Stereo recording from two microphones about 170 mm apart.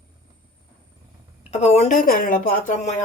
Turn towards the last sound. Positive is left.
turn(degrees=45)  # may be behind; listen again after turning